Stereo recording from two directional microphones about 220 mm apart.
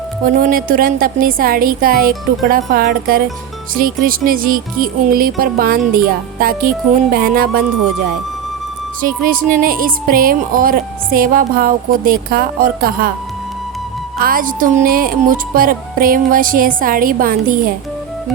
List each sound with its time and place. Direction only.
0.3 s speech: 40° right (ahead or behind)
9.0 s speech: 40° right (ahead or behind)
14.2 s speech: 40° right (ahead or behind)